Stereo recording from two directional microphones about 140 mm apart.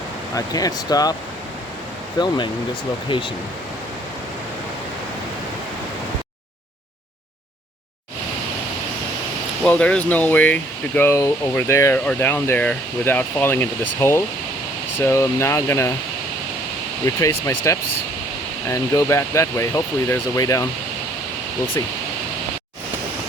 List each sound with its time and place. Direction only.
0.3 s speech: 25° left (ahead or behind)
2.1 s speech: 30° left (ahead or behind)
9.6 s speech: 10° left (ahead or behind)
17.1 s speech: 20° left (ahead or behind)